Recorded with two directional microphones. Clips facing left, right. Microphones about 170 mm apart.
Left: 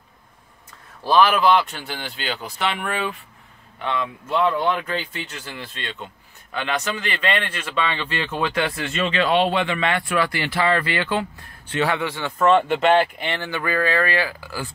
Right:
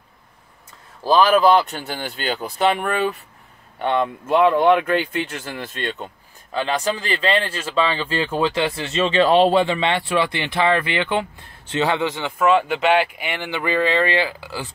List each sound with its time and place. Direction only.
1.0 s speech: 35° right (ahead or behind)
6.5 s speech: 35° right (ahead or behind)
12.4 s speech: 5° right (ahead or behind)